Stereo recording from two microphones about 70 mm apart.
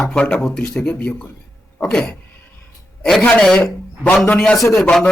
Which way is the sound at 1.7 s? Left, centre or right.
Centre.